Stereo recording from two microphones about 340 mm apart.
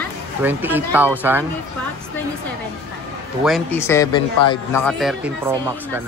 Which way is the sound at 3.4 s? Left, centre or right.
Centre.